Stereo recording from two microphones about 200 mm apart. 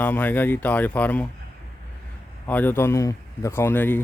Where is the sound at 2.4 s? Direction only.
10° left (ahead or behind).